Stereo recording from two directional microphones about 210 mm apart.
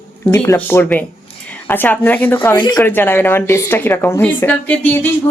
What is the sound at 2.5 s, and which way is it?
A woman's voice, 20° left (ahead or behind).